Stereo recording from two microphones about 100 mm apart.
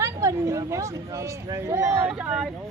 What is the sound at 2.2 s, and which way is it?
Speech, 10° right (ahead or behind).